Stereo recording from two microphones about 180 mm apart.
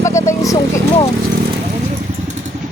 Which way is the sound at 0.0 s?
15° left (ahead or behind).